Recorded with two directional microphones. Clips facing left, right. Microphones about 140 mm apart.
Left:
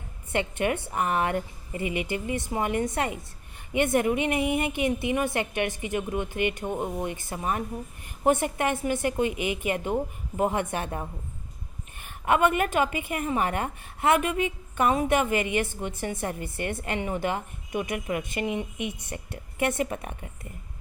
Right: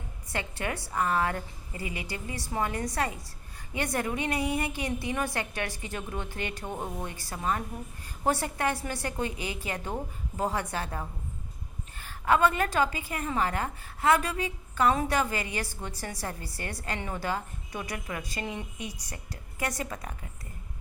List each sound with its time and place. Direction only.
0.3 s a woman's voice: 20° left (ahead or behind)